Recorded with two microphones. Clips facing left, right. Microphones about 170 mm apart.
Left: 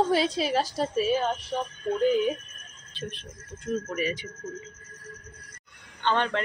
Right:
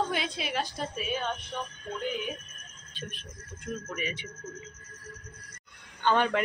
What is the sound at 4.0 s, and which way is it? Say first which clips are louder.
Speech: left 7 dB; 40° left (ahead or behind).